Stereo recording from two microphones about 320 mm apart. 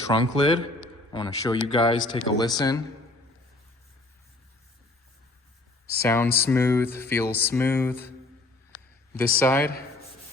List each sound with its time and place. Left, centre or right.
0.1 s speech: centre
6.0 s speech: centre
9.1 s speech: centre